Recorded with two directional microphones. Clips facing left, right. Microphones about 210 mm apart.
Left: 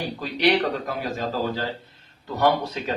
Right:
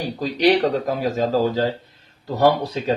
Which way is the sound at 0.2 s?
40° right (ahead or behind).